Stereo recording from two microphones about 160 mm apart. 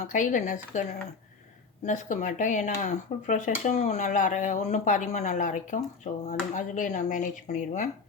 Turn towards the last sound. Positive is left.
turn(degrees=50)  # may be behind; listen again after turning